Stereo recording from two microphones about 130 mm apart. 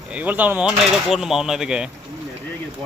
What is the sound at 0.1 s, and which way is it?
Speech, 10° right (ahead or behind).